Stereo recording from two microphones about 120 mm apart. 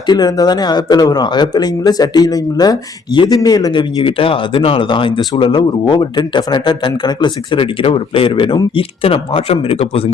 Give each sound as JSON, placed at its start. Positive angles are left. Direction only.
{"t": 0.1, "sound": "speech", "side_deg": 35}